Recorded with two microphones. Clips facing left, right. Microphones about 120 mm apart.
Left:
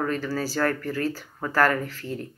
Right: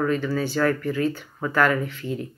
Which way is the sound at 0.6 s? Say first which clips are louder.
Right 3 dB; 45° left (ahead or behind).